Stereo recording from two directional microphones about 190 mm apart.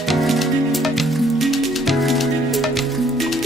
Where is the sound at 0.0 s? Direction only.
Centre (ahead or behind).